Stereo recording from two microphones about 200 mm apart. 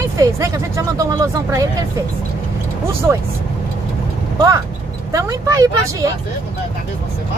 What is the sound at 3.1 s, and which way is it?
Speech, 15° right (ahead or behind).